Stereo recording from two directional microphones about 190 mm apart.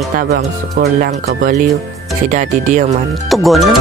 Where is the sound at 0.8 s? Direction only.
55° right (ahead or behind).